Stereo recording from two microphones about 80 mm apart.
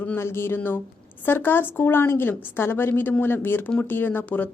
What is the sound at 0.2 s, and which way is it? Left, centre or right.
Speech, left.